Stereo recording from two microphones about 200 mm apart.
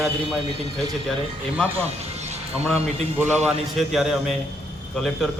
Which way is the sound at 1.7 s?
35° right (ahead or behind).